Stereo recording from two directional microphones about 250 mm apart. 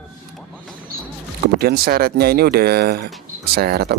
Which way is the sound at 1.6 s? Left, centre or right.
Right.